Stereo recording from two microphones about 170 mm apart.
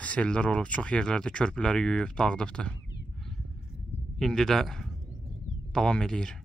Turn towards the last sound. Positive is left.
turn(degrees=5)  # may be behind; listen again after turning